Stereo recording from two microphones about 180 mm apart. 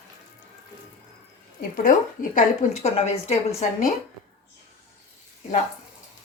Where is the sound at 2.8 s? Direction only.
35° left (ahead or behind).